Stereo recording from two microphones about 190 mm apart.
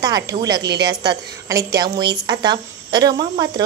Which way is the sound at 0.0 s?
20° right (ahead or behind).